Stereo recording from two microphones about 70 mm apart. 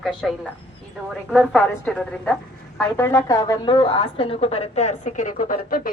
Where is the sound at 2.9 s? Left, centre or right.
Left.